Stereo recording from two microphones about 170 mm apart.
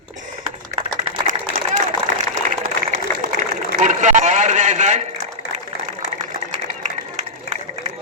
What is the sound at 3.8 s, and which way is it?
A man's voice, 45° right (ahead or behind).